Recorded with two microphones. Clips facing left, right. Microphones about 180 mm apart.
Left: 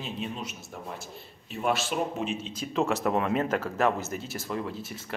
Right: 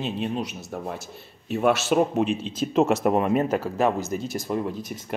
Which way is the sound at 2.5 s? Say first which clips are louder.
Right 7 dB; 20° right (ahead or behind).